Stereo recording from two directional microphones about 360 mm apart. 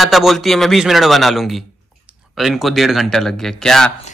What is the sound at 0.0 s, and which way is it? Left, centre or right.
Speech, centre.